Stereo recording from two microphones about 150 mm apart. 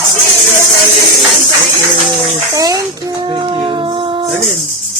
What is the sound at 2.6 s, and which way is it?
Dog, 25° right (ahead or behind).